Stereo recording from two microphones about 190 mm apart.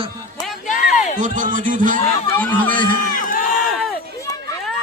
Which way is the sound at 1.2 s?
45° right (ahead or behind).